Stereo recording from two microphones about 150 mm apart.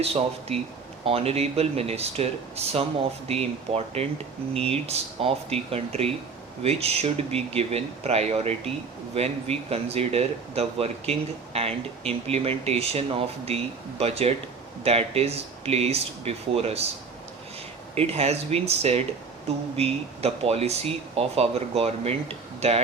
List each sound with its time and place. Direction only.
0.0 s speech: 45° right (ahead or behind)
17.9 s speech: 45° right (ahead or behind)